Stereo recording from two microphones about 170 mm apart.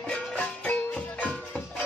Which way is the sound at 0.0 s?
5° left (ahead or behind).